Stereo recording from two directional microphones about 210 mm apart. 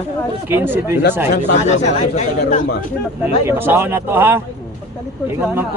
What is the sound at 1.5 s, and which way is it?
Speech, 35° left (ahead or behind).